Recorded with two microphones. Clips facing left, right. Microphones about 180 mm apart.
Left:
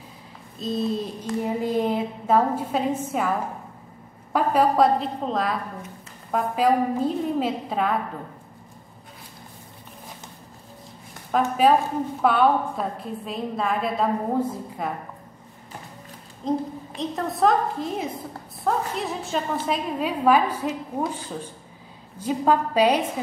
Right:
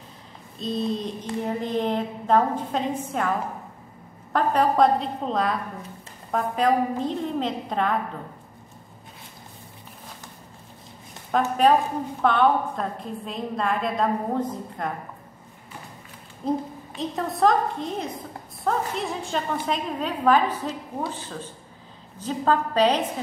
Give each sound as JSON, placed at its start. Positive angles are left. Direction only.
{"t": 0.6, "sound": "a woman's voice", "side_deg": 0}
{"t": 11.3, "sound": "a woman's voice", "side_deg": 5}
{"t": 16.4, "sound": "a woman's voice", "side_deg": 0}